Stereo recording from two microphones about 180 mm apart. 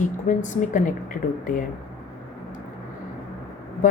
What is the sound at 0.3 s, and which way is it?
Speech, 45° left (ahead or behind).